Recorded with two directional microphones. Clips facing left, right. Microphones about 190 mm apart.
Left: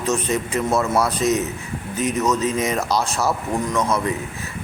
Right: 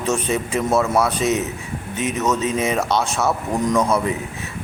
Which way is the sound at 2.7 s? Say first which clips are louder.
Right 1 dB; 5° right (ahead or behind).